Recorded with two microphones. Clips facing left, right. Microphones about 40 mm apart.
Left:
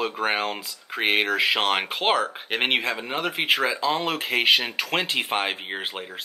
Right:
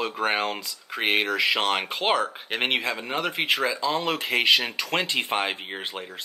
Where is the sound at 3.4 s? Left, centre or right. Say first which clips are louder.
Left 4 dB; centre.